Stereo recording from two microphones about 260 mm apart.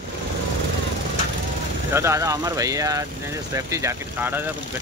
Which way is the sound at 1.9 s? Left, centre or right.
Centre.